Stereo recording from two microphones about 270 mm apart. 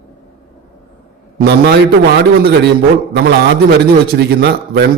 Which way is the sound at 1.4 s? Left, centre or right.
Right.